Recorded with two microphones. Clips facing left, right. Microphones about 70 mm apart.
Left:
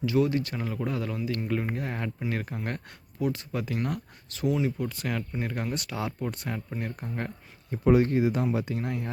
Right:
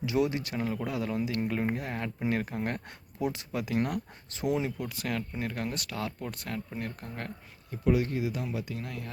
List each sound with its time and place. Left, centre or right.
0.0 s speech: centre
3.2 s speech: centre
3.5 s speech: centre
4.4 s speech: right
4.6 s speech: centre
7.7 s speech: left